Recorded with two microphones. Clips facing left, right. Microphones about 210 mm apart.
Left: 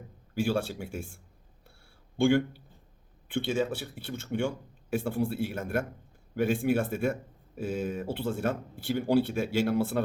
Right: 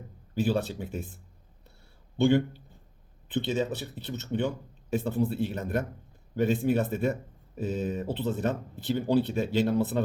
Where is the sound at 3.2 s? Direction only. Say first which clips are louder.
Even; 10° left (ahead or behind).